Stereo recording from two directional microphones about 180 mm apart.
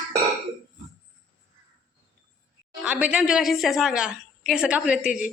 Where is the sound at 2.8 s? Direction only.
5° right (ahead or behind).